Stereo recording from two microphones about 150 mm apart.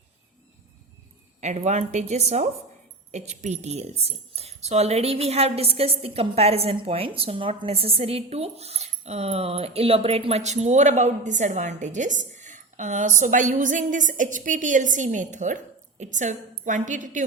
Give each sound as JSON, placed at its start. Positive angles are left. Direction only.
{"t": 1.4, "sound": "a woman's voice", "side_deg": -50}